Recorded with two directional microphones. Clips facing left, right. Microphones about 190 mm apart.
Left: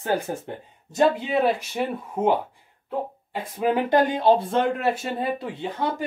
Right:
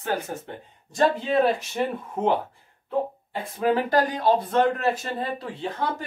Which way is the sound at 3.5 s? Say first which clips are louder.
Left 1 dB; 15° left (ahead or behind).